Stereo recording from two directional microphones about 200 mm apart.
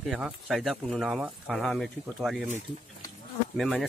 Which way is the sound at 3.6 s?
Centre (ahead or behind).